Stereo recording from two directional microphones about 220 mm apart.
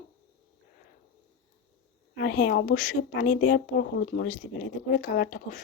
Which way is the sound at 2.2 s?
45° left (ahead or behind).